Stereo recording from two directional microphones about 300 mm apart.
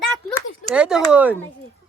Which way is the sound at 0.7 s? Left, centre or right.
Centre.